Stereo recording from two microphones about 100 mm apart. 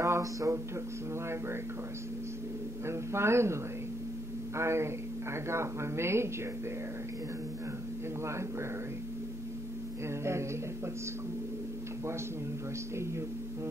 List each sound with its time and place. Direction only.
0.0 s speech: 30° right (ahead or behind)
2.9 s speech: 25° right (ahead or behind)
4.6 s speech: 25° right (ahead or behind)
10.2 s speech: 25° right (ahead or behind)